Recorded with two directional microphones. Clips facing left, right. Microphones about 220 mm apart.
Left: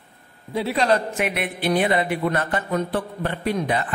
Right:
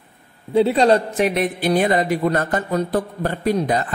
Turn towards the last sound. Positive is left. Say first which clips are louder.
# right 4 dB
turn(degrees=-40)  # may be behind; listen again after turning